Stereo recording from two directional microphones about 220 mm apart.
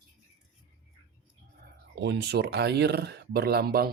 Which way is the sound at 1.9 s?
50° right (ahead or behind).